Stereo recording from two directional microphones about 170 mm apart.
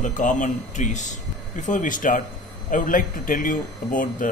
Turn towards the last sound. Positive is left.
turn(degrees=55)  # may be behind; listen again after turning